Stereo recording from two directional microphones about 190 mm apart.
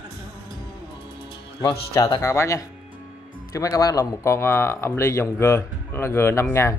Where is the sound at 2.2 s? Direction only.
15° left (ahead or behind).